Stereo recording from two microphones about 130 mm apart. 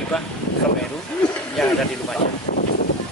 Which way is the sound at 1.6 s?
Centre (ahead or behind).